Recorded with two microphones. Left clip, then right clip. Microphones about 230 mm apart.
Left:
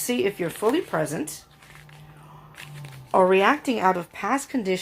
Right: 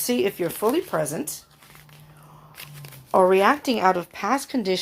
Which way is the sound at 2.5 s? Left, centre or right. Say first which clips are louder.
Even; right.